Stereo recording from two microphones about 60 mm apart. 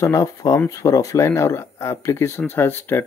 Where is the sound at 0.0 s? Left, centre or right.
Left.